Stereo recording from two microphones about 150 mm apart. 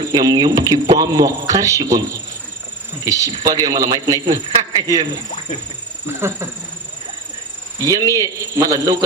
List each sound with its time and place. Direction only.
0.1 s a man's voice: 25° right (ahead or behind)
3.1 s a man's voice: 25° right (ahead or behind)
6.1 s speech: 15° right (ahead or behind)
7.9 s a man's voice: 25° right (ahead or behind)